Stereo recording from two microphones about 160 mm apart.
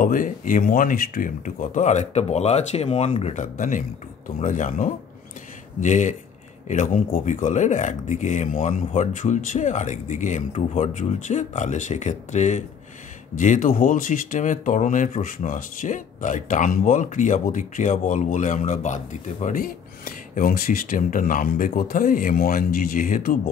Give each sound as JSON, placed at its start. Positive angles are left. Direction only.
{"t": 0.0, "sound": "speech", "side_deg": 55}
{"t": 3.3, "sound": "speech", "side_deg": 55}